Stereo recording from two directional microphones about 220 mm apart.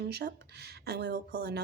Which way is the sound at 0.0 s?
50° right (ahead or behind).